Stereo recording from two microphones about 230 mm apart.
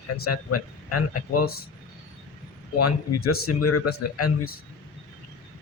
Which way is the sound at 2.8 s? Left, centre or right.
Left.